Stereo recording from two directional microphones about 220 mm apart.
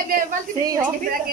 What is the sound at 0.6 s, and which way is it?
Speech, 15° right (ahead or behind).